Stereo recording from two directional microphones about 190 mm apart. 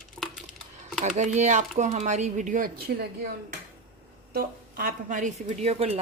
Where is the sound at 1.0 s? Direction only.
40° right (ahead or behind).